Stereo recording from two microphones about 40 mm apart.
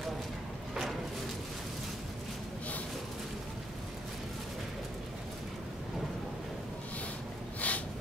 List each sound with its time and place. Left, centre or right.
7.6 s snort: left